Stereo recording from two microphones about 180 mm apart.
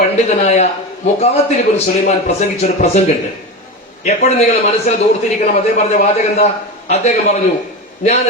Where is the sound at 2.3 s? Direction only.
40° left (ahead or behind).